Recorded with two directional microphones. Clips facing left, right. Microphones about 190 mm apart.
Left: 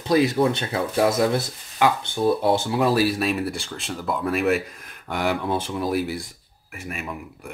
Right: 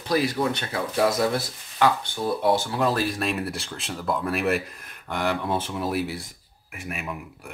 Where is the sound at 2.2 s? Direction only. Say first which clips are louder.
Left 3 dB; 25° left (ahead or behind).